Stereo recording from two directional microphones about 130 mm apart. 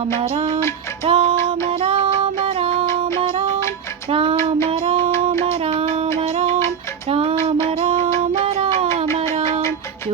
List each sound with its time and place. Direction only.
0.2 s music: 45° right (ahead or behind)
4.1 s child singing: 40° right (ahead or behind)
4.7 s music: 45° right (ahead or behind)
7.1 s music: 50° right (ahead or behind)
8.3 s a sound: 45° right (ahead or behind)